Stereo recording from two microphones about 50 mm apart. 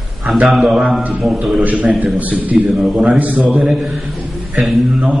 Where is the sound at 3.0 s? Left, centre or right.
Right.